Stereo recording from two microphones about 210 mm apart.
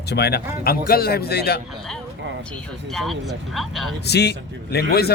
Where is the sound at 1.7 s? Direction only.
5° left (ahead or behind).